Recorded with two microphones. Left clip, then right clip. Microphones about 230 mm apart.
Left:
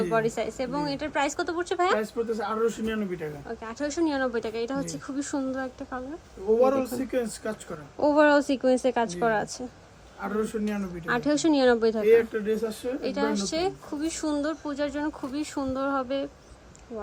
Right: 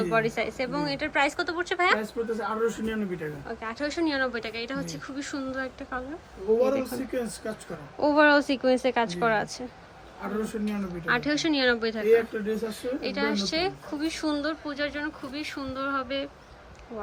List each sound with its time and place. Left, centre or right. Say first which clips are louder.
0.0 s speech: even; centre
2.0 s speech: left 2 dB; centre
6.6 s speech: left 2 dB; centre
11.0 s speech: left 1 dB; centre
12.0 s speech: even; centre
13.0 s speech: left 1 dB; centre